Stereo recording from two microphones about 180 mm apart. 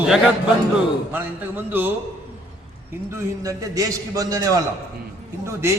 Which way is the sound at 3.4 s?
20° right (ahead or behind).